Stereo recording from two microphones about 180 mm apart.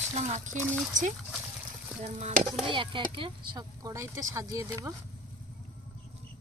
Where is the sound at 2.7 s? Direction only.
25° right (ahead or behind).